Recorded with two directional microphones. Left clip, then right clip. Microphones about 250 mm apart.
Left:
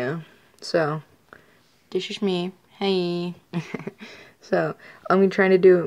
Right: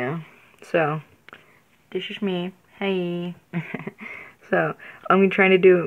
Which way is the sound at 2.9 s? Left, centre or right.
Centre.